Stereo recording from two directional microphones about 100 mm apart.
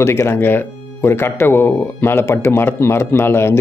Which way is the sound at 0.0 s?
30° left (ahead or behind).